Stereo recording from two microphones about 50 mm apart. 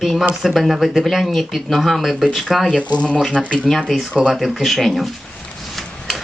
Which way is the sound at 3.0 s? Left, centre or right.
Left.